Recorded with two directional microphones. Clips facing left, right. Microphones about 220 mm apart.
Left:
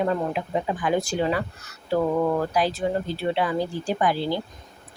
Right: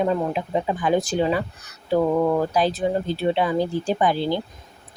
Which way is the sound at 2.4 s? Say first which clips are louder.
Right 2 dB; 20° right (ahead or behind).